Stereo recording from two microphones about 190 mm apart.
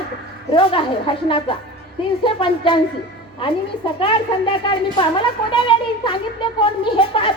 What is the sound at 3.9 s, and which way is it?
Speech, 25° left (ahead or behind).